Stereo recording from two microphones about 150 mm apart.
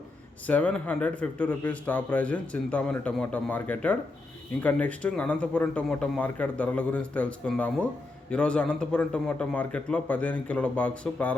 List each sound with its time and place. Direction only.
0.4 s speech: 10° left (ahead or behind)